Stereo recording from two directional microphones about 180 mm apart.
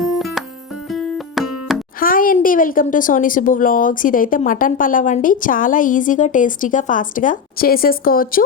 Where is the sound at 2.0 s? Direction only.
50° left (ahead or behind).